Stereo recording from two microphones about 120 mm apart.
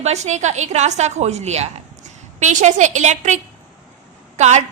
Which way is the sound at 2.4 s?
90° right.